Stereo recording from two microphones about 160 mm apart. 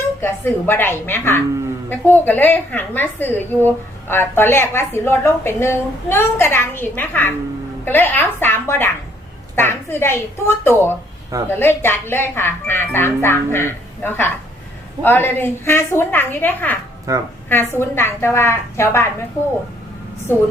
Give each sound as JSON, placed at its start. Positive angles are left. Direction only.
{"t": 0.2, "sound": "a woman's voice", "side_deg": 15}
{"t": 17.1, "sound": "a woman's voice", "side_deg": -20}
{"t": 17.5, "sound": "a woman's voice", "side_deg": 15}
{"t": 20.3, "sound": "a woman's voice", "side_deg": 15}